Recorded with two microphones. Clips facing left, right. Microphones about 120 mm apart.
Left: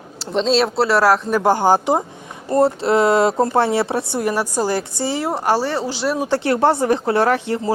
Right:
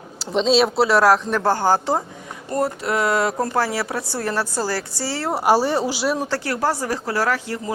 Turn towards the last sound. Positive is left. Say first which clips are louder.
# left 5 dB
turn(degrees=25)  # may be behind; listen again after turning